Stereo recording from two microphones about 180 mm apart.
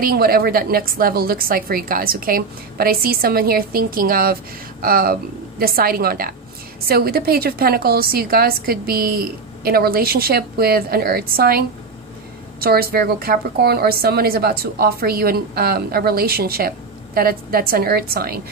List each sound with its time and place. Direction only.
0.0 s a woman's voice: 55° right (ahead or behind)